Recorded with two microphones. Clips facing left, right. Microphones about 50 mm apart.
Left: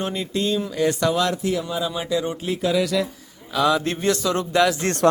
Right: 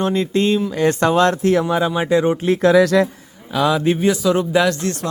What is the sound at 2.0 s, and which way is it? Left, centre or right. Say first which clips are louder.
Speech: right 8 dB; right.